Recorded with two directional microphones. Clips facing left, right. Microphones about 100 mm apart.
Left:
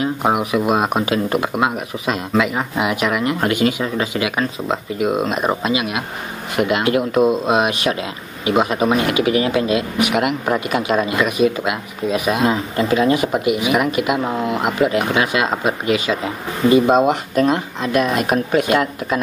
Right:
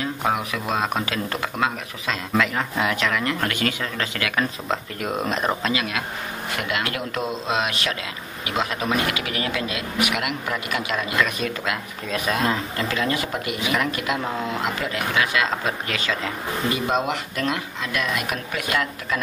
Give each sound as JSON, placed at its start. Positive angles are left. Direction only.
{"t": 0.0, "sound": "speech", "side_deg": 20}
{"t": 11.2, "sound": "speech", "side_deg": 10}